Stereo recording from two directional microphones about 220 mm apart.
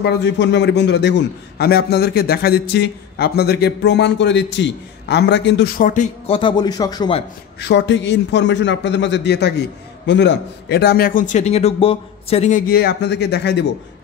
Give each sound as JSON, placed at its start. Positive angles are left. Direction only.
{"t": 0.0, "sound": "a man's voice", "side_deg": 50}
{"t": 7.6, "sound": "a man's voice", "side_deg": 50}